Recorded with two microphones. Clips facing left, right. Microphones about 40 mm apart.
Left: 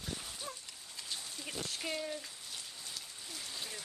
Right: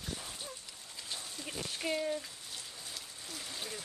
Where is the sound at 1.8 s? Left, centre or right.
Centre.